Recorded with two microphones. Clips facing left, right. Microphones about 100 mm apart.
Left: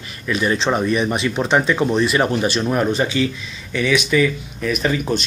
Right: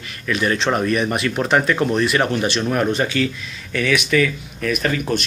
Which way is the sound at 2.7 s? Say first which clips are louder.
Left 1 dB; 5° left (ahead or behind).